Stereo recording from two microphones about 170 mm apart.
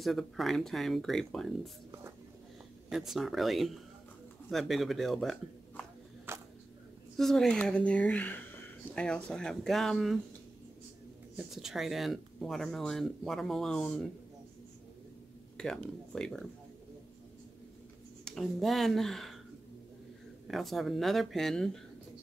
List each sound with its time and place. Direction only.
0.0 s speech: centre (ahead or behind)
2.9 s speech: centre (ahead or behind)
6.3 s a sound: 15° right (ahead or behind)
7.2 s speech: centre (ahead or behind)
11.3 s speech: centre (ahead or behind)
15.5 s speech: 5° left (ahead or behind)
18.2 s speech: centre (ahead or behind)
20.4 s speech: centre (ahead or behind)